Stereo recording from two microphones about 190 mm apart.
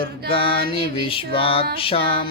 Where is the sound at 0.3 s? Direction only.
30° left (ahead or behind).